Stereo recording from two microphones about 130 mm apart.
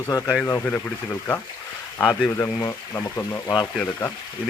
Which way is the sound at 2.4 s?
20° left (ahead or behind).